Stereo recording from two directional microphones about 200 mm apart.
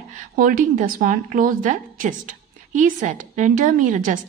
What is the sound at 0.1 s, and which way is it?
A woman's voice, 40° right (ahead or behind).